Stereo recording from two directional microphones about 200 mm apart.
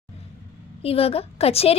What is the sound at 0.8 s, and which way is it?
Speech, 30° left (ahead or behind).